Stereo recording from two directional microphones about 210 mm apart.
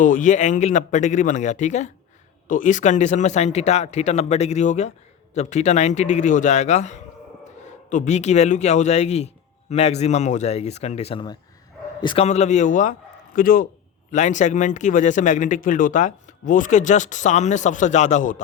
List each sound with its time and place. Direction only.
0.0 s a man's voice: 40° left (ahead or behind)